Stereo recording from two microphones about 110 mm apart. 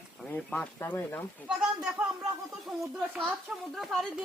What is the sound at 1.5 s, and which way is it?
A woman's voice, 10° right (ahead or behind).